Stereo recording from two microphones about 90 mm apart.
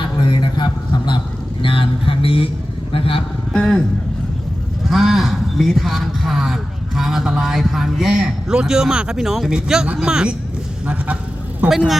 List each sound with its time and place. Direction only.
0.3 s a sound: 55° left (ahead or behind)
1.6 s speech: 75° left (ahead or behind)
3.5 s speech: 10° left (ahead or behind)
4.9 s a man's voice: centre (ahead or behind)
11.7 s a man's voice: 5° right (ahead or behind)